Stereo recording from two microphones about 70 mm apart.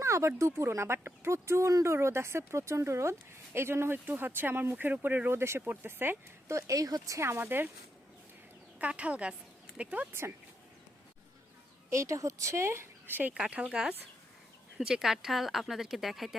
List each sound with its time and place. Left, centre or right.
0.0 s speech: right
6.5 s speech: right
7.2 s speech: right
8.8 s speech: centre
11.9 s speech: right
13.3 s speech: centre